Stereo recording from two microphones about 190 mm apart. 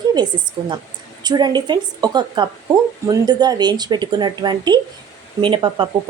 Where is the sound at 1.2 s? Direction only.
20° right (ahead or behind).